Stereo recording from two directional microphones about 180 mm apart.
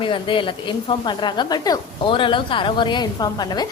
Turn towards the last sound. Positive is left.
turn(degrees=20)  # may be behind; listen again after turning